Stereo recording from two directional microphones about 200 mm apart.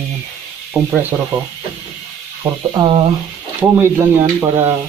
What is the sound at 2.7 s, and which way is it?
Speech, 20° right (ahead or behind).